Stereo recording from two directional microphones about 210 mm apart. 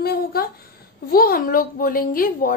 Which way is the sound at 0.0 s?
45° left (ahead or behind).